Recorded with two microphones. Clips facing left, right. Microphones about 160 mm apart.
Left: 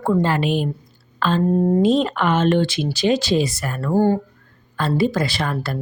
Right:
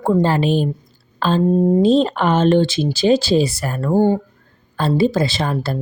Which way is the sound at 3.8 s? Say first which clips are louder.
Right 2 dB; 20° right (ahead or behind).